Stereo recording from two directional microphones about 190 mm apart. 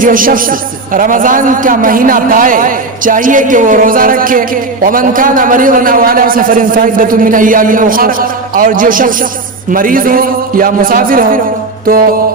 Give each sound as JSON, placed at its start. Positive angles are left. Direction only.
{"t": 0.0, "sound": "a man's voice", "side_deg": -45}